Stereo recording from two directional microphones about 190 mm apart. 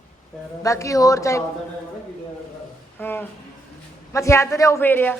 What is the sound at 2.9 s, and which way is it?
A woman's voice, 10° left (ahead or behind).